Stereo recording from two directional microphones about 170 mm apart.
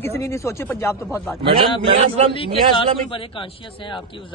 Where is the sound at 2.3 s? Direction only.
30° left (ahead or behind).